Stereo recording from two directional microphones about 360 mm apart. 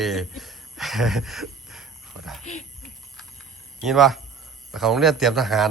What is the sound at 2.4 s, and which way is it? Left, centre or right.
Speech, centre.